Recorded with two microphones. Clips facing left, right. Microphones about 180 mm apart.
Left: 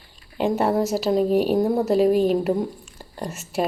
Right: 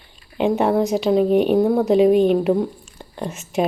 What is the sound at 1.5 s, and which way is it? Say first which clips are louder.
Speech: right 4 dB; 55° right (ahead or behind).